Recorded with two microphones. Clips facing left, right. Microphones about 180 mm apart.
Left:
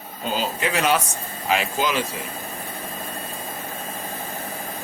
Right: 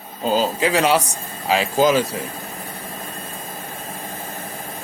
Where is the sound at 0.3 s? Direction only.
35° right (ahead or behind).